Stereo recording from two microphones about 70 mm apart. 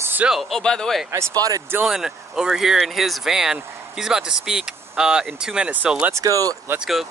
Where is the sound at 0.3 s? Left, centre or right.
Centre.